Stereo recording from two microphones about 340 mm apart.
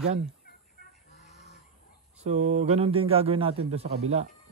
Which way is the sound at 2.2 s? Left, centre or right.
Centre.